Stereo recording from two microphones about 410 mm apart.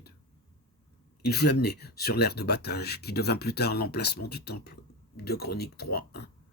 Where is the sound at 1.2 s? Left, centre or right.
Left.